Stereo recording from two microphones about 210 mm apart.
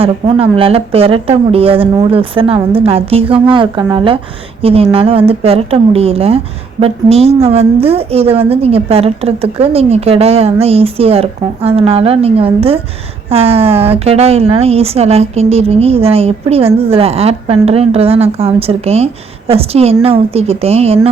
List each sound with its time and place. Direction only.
0.0 s speech: 25° right (ahead or behind)